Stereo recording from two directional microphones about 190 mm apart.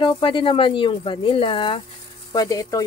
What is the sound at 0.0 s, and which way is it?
A woman's voice, 25° left (ahead or behind).